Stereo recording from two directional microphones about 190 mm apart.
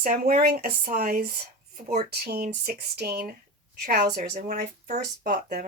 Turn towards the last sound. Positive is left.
turn(degrees=-45)  # may be behind; listen again after turning